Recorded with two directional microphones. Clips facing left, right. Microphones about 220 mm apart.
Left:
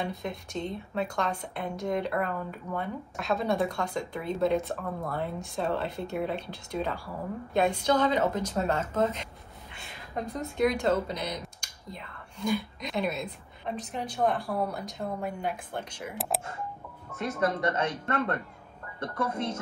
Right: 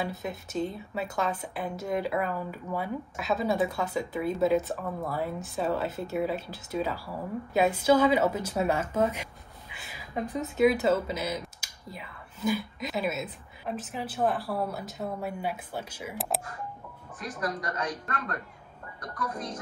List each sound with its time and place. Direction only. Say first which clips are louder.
0.0 s a woman's voice: even; 5° right (ahead or behind)
17.1 s speech: left 5 dB; 25° left (ahead or behind)